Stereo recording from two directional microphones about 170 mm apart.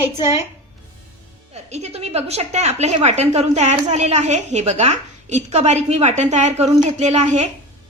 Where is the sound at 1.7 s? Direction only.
40° right (ahead or behind).